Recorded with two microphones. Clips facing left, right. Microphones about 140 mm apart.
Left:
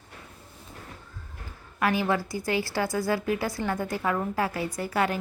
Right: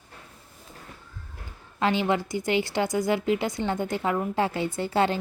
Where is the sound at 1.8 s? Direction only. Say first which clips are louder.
Right 1 dB; 25° right (ahead or behind).